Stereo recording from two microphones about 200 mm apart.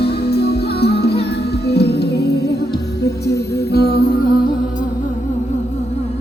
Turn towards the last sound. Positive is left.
turn(degrees=50)  # may be behind; listen again after turning